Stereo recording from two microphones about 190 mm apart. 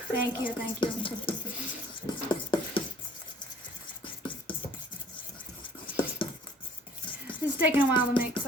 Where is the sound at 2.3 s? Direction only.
25° left (ahead or behind).